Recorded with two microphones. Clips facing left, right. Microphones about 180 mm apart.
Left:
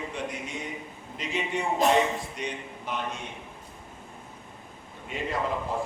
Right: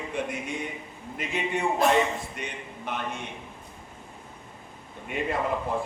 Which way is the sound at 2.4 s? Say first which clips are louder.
Left 3 dB; 55° right (ahead or behind).